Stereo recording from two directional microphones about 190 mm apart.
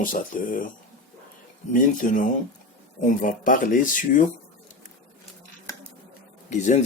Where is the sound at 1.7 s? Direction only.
45° left (ahead or behind).